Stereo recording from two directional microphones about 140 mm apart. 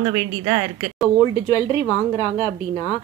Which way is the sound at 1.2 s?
35° left (ahead or behind).